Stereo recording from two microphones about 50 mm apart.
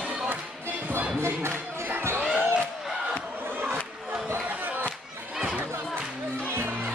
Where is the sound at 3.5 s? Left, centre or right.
Right.